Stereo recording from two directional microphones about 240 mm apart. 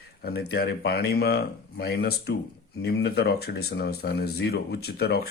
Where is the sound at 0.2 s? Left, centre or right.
Left.